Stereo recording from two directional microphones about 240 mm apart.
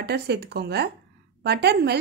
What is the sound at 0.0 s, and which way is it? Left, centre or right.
Speech, right.